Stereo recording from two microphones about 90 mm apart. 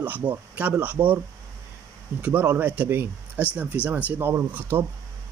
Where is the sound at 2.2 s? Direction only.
25° right (ahead or behind).